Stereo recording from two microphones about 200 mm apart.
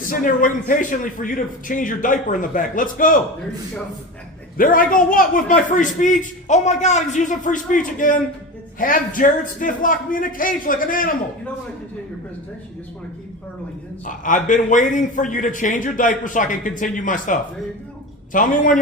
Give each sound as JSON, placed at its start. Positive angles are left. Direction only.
{"t": 0.0, "sound": "a man's voice", "side_deg": 40}
{"t": 4.5, "sound": "a man's voice", "side_deg": 45}
{"t": 14.0, "sound": "a man's voice", "side_deg": 40}